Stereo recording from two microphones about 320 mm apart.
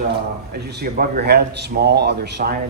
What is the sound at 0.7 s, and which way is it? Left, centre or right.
Speech, right.